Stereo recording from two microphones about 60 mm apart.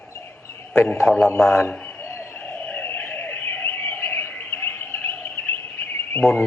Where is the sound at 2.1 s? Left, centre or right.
Left.